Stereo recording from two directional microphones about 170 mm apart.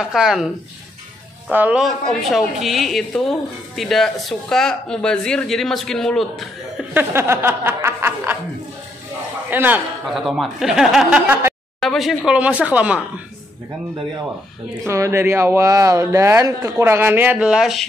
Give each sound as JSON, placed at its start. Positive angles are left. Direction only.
{"t": 0.0, "sound": "speech", "side_deg": -5}
{"t": 1.5, "sound": "speech", "side_deg": -10}
{"t": 6.9, "sound": "snicker", "side_deg": -15}
{"t": 9.5, "sound": "a man's voice", "side_deg": -10}
{"t": 10.0, "sound": "speech", "side_deg": 0}
{"t": 11.8, "sound": "speech", "side_deg": 0}
{"t": 14.9, "sound": "speech", "side_deg": -15}